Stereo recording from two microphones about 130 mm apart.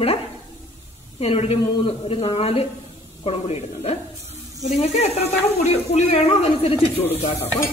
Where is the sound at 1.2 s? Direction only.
50° left (ahead or behind).